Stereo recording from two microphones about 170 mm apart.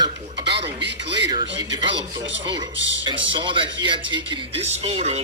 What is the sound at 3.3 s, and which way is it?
A man's voice, 30° right (ahead or behind).